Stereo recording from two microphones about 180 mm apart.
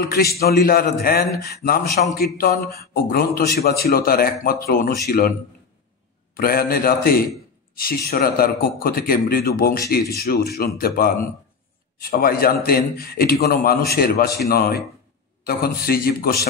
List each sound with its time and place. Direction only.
0.1 s a man's voice: 60° left (ahead or behind)
6.3 s a man's voice: 55° left (ahead or behind)